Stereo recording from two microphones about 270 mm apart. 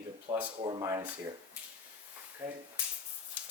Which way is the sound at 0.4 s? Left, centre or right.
Centre.